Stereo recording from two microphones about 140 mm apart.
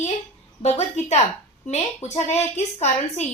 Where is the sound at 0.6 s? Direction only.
55° left (ahead or behind).